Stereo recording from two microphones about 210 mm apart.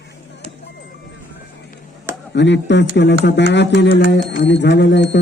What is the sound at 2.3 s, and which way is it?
Speech, 55° left (ahead or behind).